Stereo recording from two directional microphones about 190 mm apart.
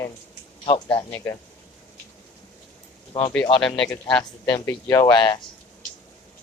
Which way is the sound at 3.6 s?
5° left (ahead or behind).